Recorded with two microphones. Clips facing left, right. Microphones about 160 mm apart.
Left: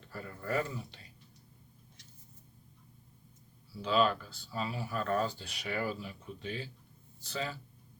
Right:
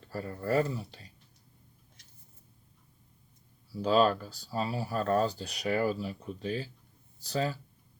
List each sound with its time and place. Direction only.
0.1 s speech: 35° right (ahead or behind)
3.8 s speech: 40° right (ahead or behind)